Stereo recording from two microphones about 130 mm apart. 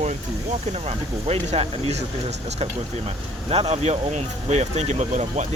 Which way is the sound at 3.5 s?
50° right (ahead or behind).